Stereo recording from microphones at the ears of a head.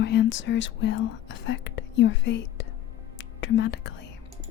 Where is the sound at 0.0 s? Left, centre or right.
Left.